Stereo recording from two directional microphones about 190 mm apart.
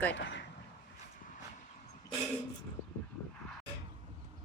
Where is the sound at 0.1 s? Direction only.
70° left (ahead or behind).